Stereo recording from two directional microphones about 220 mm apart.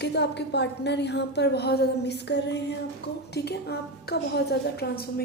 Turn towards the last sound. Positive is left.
turn(degrees=45)  # may be behind; listen again after turning